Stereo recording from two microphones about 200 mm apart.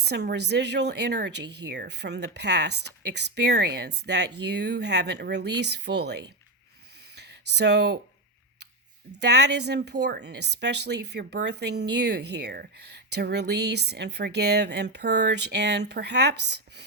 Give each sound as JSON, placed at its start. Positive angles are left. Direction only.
{"t": 0.0, "sound": "speech", "side_deg": -55}
{"t": 7.5, "sound": "speech", "side_deg": -60}
{"t": 9.2, "sound": "speech", "side_deg": -60}